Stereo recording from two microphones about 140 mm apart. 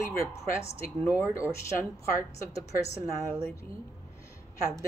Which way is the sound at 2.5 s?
25° left (ahead or behind).